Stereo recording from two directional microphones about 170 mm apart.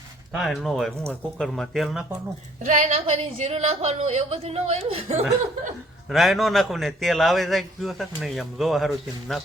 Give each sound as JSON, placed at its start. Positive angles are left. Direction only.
{"t": 0.3, "sound": "a man's voice", "side_deg": 0}
{"t": 2.6, "sound": "a woman's voice", "side_deg": -45}
{"t": 6.1, "sound": "a man's voice", "side_deg": 0}